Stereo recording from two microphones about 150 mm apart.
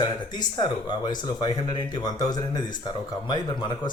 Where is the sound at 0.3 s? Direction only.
30° left (ahead or behind).